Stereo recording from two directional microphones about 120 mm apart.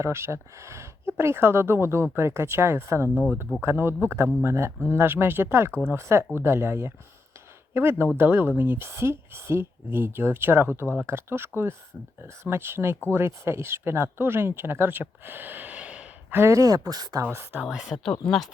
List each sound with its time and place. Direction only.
0.0 s speech: 20° right (ahead or behind)
17.2 s speech: 15° right (ahead or behind)